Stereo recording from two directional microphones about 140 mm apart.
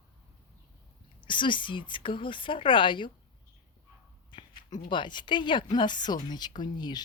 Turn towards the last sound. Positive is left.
turn(degrees=30)  # may be behind; listen again after turning